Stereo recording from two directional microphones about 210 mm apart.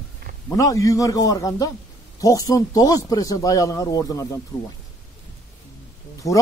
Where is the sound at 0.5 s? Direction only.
15° left (ahead or behind).